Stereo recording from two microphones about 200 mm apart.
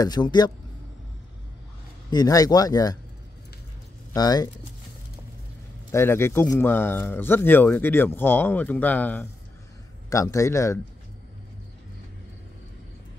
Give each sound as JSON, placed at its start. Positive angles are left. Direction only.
{"t": 0.0, "sound": "speech", "side_deg": 20}
{"t": 2.0, "sound": "speech", "side_deg": 20}
{"t": 4.1, "sound": "speech", "side_deg": 20}
{"t": 5.9, "sound": "speech", "side_deg": 10}